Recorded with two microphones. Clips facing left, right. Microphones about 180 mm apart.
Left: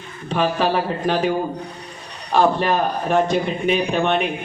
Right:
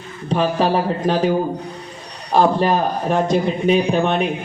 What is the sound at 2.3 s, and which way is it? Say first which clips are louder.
A man's voice: right 2 dB; 35° right (ahead or behind).